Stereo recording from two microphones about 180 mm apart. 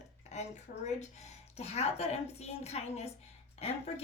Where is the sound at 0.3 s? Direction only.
40° left (ahead or behind).